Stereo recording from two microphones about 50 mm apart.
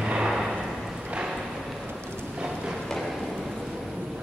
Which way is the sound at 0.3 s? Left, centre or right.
Centre.